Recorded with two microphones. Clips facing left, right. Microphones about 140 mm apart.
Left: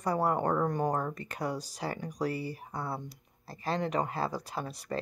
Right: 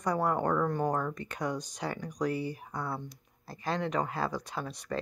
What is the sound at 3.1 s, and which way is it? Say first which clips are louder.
Speech: right 1 dB; centre (ahead or behind).